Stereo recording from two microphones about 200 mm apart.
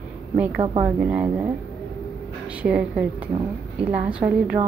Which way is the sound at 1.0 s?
5° right (ahead or behind).